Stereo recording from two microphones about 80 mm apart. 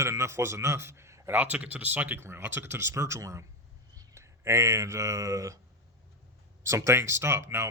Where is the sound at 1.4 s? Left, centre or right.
Centre; by 5.6 s right.